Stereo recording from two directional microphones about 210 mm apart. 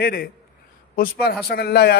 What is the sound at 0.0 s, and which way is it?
A man's voice, 45° left (ahead or behind).